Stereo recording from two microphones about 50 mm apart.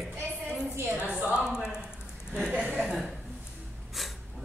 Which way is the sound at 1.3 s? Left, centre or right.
Centre.